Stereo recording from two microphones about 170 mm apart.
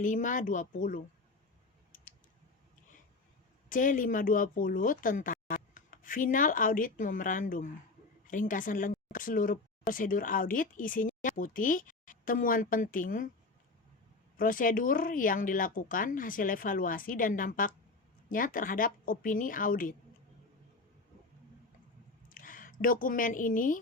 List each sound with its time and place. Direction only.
0.0 s a woman's voice: 50° left (ahead or behind)
3.7 s a woman's voice: 50° left (ahead or behind)
14.3 s a woman's voice: 55° left (ahead or behind)
22.3 s speech: 55° left (ahead or behind)